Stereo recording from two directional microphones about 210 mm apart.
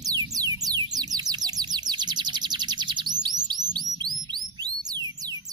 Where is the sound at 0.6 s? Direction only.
20° right (ahead or behind).